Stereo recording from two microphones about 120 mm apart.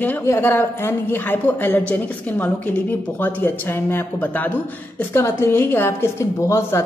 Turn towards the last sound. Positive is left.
turn(degrees=20)  # may be behind; listen again after turning